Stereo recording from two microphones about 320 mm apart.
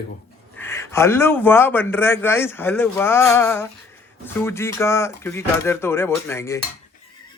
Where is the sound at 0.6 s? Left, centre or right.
Centre.